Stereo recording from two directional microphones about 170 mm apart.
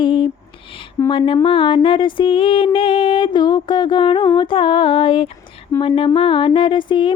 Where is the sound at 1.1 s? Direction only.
30° left (ahead or behind).